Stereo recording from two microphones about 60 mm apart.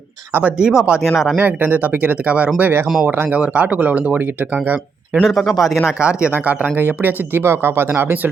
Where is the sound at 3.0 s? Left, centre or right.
Right.